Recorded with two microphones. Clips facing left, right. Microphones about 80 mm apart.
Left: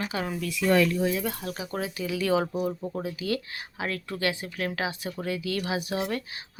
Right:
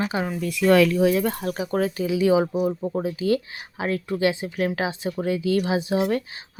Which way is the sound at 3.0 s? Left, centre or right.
Right.